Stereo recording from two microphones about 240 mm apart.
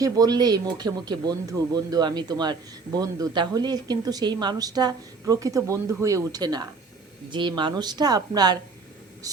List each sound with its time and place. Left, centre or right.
0.0 s speech: centre